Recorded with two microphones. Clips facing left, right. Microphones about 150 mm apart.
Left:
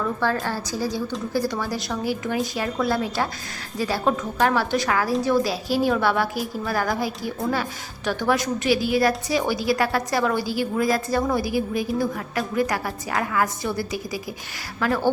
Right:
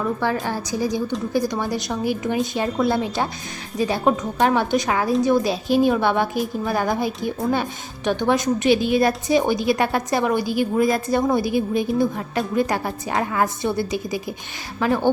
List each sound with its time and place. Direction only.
0.4 s a woman's voice: 15° right (ahead or behind)